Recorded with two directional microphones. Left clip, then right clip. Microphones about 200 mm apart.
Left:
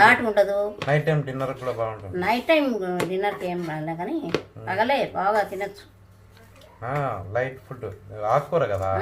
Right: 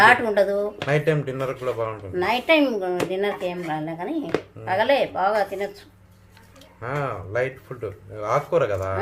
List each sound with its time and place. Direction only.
0.0 s speech: 20° right (ahead or behind)
6.8 s speech: 20° right (ahead or behind)